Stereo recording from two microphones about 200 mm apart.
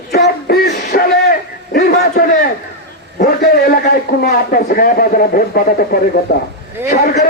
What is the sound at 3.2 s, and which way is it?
A man's voice, 50° left (ahead or behind).